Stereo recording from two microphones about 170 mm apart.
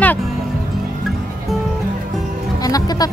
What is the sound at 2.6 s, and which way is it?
Speech, 20° left (ahead or behind).